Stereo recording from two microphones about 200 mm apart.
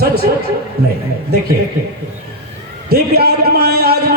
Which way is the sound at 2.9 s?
50° right (ahead or behind).